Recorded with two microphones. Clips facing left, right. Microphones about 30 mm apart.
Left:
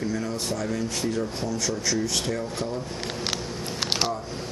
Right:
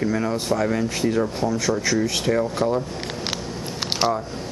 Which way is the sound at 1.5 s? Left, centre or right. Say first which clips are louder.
Right 5 dB; centre.